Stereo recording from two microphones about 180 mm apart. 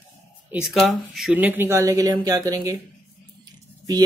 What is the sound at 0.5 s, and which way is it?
Speech, centre (ahead or behind).